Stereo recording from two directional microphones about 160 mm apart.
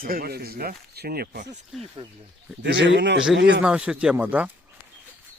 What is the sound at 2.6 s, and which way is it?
Speech, 90° right.